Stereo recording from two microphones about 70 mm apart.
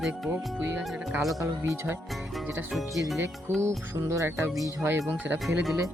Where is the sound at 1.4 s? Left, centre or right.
Right.